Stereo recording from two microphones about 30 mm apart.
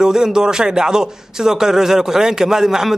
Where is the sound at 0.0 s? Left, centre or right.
Right.